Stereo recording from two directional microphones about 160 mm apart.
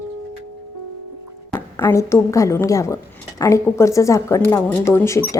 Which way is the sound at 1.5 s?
15° left (ahead or behind).